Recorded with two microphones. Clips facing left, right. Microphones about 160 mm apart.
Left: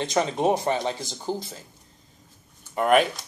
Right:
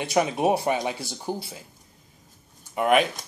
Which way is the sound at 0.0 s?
15° right (ahead or behind).